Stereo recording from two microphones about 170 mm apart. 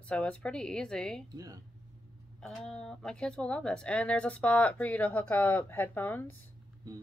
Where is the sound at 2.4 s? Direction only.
Centre (ahead or behind).